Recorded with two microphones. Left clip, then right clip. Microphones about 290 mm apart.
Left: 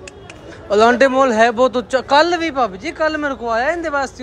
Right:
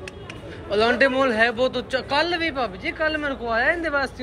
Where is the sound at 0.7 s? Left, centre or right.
Left.